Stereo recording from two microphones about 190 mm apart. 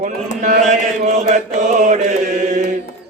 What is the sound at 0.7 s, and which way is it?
Mantra, 40° right (ahead or behind).